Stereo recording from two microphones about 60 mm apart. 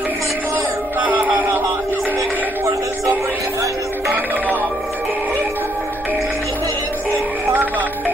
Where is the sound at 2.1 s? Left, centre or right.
Right.